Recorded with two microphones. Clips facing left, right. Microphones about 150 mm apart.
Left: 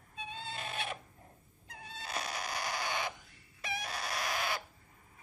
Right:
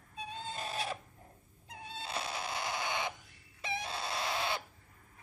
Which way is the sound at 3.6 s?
25° right (ahead or behind).